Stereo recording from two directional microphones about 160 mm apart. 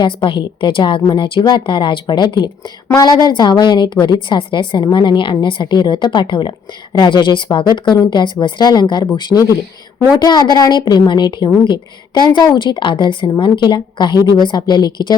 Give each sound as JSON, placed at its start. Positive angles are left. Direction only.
{"t": 0.0, "sound": "a woman's voice", "side_deg": 30}